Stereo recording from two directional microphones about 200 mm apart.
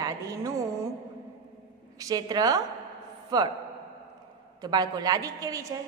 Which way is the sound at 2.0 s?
20° right (ahead or behind).